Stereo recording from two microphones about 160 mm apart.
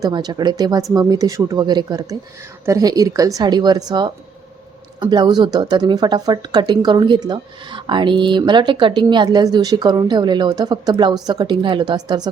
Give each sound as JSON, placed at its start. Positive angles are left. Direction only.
{"t": 0.0, "sound": "speech", "side_deg": -25}